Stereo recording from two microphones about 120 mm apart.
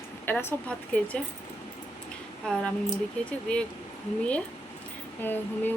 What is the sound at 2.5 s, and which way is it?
Speech, 10° left (ahead or behind).